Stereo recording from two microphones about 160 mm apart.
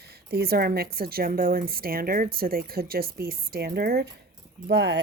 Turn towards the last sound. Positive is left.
turn(degrees=-90)